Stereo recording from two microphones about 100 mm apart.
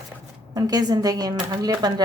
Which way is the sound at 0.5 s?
40° right (ahead or behind).